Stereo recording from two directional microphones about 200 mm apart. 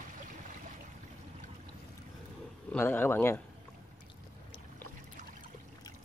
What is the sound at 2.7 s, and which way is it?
Speech, 10° left (ahead or behind).